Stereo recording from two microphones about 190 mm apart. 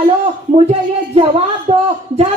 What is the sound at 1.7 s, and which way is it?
Speech, 35° right (ahead or behind).